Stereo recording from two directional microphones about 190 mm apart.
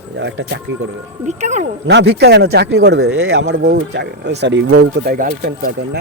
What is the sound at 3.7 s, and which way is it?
Speech, 65° right (ahead or behind).